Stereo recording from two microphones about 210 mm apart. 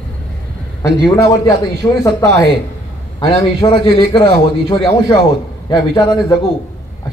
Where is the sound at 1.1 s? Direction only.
20° left (ahead or behind).